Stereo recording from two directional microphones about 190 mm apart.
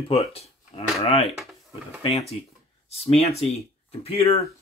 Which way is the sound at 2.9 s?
30° left (ahead or behind).